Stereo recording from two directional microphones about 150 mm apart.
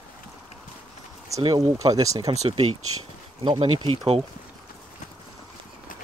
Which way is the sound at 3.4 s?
35° right (ahead or behind).